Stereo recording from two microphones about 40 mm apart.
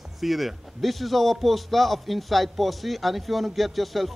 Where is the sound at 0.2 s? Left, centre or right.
Centre.